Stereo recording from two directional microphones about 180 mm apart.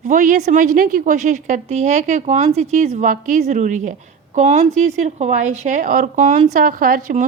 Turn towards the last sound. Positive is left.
turn(degrees=-50)  # may be behind; listen again after turning